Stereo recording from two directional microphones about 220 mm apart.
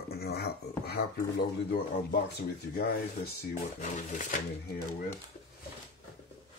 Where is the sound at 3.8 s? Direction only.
35° left (ahead or behind).